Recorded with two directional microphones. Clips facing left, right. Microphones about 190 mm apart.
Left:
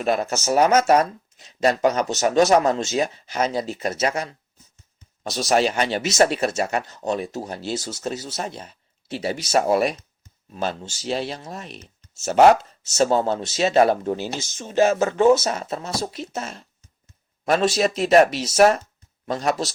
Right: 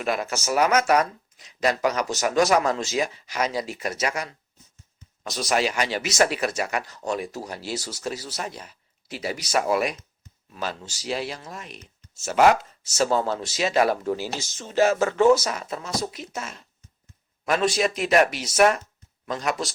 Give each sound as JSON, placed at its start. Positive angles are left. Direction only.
{"t": 0.0, "sound": "speech", "side_deg": 25}